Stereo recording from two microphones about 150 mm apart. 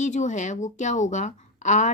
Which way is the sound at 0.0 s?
55° left (ahead or behind).